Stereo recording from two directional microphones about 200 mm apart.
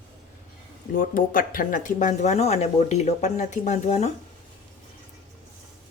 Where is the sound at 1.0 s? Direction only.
45° left (ahead or behind).